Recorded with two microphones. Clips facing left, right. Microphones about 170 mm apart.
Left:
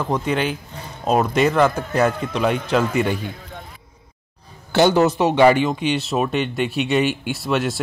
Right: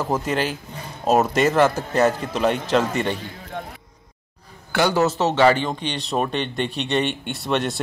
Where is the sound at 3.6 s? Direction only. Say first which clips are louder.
Right 6 dB; 65° right (ahead or behind).